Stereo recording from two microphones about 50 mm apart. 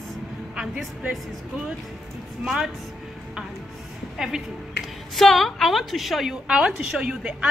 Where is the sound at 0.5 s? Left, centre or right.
Centre.